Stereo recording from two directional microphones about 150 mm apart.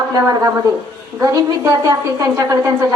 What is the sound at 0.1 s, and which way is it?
A woman's voice, 25° right (ahead or behind).